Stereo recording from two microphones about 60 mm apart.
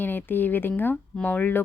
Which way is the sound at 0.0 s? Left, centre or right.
Left.